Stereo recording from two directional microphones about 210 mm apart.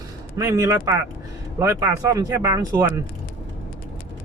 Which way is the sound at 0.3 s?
15° right (ahead or behind).